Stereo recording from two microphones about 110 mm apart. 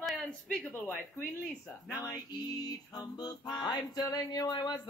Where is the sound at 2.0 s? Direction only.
35° left (ahead or behind).